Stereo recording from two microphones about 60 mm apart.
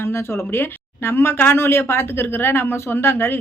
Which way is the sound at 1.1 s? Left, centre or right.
Left.